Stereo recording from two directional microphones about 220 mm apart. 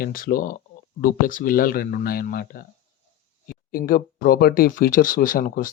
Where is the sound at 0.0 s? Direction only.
40° left (ahead or behind).